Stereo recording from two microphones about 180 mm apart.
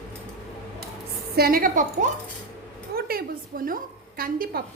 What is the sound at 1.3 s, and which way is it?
A child's voice, 55° right (ahead or behind).